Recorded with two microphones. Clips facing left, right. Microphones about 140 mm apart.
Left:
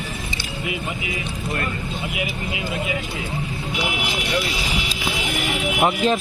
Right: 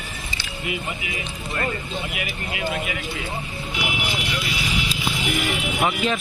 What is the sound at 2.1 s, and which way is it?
Speech, 20° left (ahead or behind).